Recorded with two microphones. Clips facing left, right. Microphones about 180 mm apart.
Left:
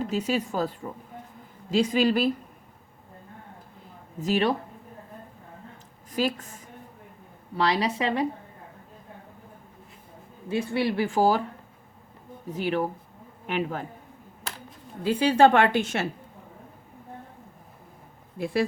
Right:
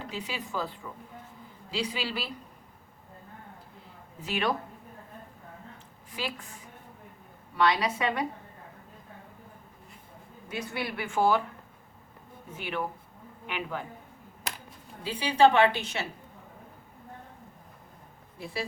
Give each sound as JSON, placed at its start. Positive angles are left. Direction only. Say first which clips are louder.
{"t": 0.0, "sound": "a woman's voice", "louder": "left 11 dB", "side_deg": 45}
{"t": 4.2, "sound": "a woman's voice", "louder": "left 6 dB", "side_deg": 35}
{"t": 6.1, "sound": "a woman's voice", "louder": "left 10 dB", "side_deg": 40}
{"t": 7.5, "sound": "a woman's voice", "louder": "left 1 dB", "side_deg": 30}
{"t": 10.5, "sound": "a woman's voice", "louder": "left 9 dB", "side_deg": 25}
{"t": 12.5, "sound": "a woman's voice", "louder": "left 7 dB", "side_deg": 40}
{"t": 15.0, "sound": "a woman's voice", "louder": "left 4 dB", "side_deg": 50}
{"t": 18.3, "sound": "speech", "louder": "left 10 dB", "side_deg": 55}